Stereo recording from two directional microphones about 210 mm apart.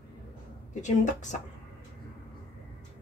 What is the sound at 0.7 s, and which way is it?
Speech, 35° left (ahead or behind).